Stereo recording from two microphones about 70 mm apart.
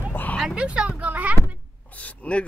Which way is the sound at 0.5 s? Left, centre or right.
Centre.